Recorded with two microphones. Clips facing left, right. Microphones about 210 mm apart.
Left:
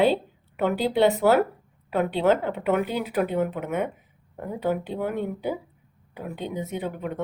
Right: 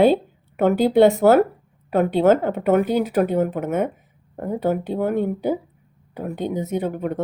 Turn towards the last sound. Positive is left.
turn(degrees=-45)  # may be behind; listen again after turning